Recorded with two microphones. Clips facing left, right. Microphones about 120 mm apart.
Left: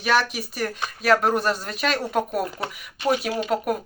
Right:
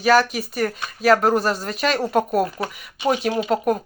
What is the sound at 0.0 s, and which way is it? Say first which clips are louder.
Speech: right 5 dB; centre (ahead or behind).